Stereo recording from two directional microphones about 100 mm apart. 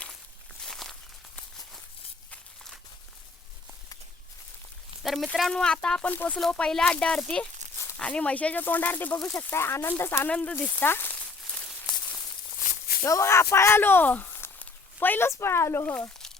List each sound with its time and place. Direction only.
0.6 s walk: 5° left (ahead or behind)
5.0 s speech: centre (ahead or behind); by 10.2 s 25° left (ahead or behind)
10.2 s speech: 10° left (ahead or behind)
13.1 s speech: 30° left (ahead or behind)